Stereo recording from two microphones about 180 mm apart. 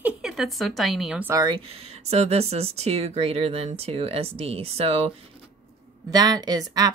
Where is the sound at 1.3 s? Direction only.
25° right (ahead or behind).